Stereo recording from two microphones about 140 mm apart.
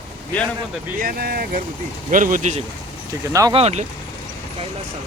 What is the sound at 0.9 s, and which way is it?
Speech, 90° right.